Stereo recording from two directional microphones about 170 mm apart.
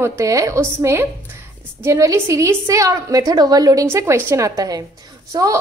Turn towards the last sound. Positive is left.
turn(degrees=-20)  # may be behind; listen again after turning